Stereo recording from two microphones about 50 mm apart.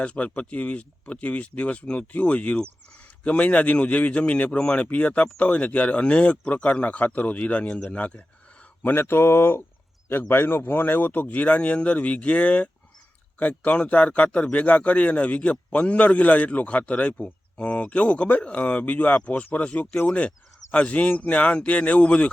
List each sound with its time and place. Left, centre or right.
0.0 s a man's voice: left
8.8 s a man's voice: left